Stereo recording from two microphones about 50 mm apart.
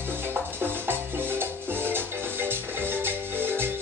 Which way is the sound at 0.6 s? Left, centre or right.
Right.